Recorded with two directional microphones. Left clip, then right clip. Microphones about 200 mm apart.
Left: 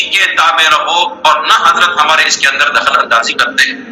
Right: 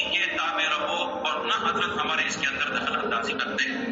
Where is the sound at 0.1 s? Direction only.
55° left (ahead or behind).